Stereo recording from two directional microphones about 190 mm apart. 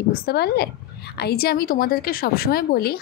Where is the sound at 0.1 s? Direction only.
55° left (ahead or behind).